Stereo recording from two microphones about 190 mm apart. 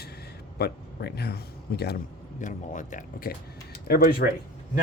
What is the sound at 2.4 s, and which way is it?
Speech, 40° left (ahead or behind).